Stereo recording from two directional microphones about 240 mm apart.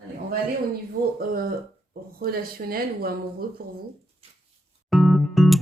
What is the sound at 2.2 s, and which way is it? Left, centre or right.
Speech, right.